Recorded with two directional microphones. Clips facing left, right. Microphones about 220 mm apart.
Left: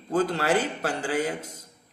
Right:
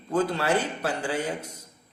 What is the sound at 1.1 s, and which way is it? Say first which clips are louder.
Speech: left 2 dB; 90° left.